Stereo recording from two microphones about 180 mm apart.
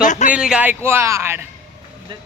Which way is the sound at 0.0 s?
45° left (ahead or behind).